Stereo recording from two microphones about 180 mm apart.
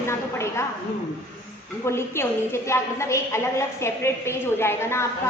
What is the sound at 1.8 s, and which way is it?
A woman's voice, 15° left (ahead or behind).